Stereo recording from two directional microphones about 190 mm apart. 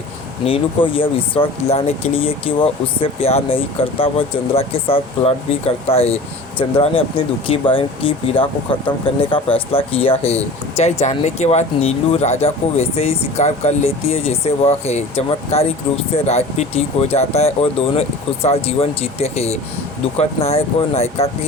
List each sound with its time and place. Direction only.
0.4 s speech: 30° left (ahead or behind)